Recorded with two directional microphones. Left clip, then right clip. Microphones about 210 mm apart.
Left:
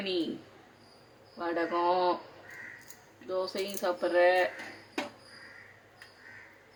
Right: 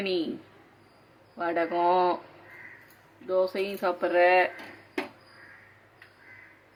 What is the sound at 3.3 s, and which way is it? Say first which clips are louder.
A woman's voice: right 7 dB; 10° right (ahead or behind).